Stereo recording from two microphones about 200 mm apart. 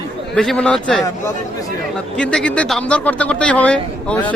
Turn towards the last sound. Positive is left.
turn(degrees=5)  # may be behind; listen again after turning